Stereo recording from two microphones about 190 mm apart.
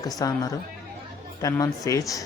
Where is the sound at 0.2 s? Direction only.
20° left (ahead or behind).